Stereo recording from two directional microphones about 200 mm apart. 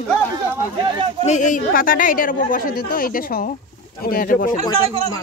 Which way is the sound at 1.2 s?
40° left (ahead or behind).